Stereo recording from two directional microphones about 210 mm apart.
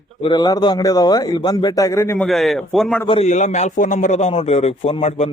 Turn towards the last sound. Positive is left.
turn(degrees=30)  # may be behind; listen again after turning